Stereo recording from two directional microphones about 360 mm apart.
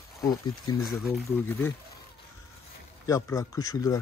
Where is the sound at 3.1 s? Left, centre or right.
Centre.